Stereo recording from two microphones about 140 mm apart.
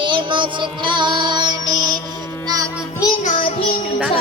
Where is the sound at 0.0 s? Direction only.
35° right (ahead or behind).